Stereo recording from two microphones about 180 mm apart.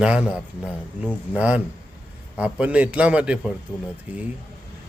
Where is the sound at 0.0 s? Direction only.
5° right (ahead or behind).